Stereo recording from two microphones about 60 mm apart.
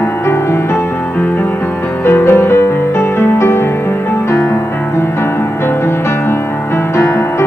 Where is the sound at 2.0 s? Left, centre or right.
Left.